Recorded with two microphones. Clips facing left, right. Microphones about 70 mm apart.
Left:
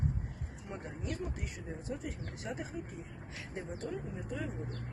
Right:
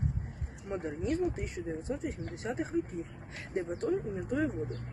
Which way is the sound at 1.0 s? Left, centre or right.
Right.